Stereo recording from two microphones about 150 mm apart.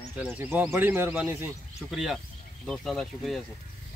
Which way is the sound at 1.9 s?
Centre (ahead or behind).